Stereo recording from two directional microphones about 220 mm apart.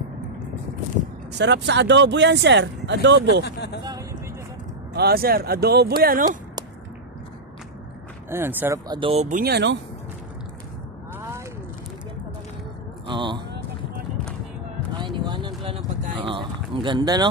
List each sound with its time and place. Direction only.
1.3 s speech: 50° right (ahead or behind)
3.4 s speech: 50° left (ahead or behind)
4.9 s speech: 45° right (ahead or behind)
8.3 s speech: 10° right (ahead or behind); by 9.4 s 30° right (ahead or behind)
9.4 s speech: 50° right (ahead or behind)
13.0 s a sound: 20° right (ahead or behind)
15.0 s a sound: 20° right (ahead or behind)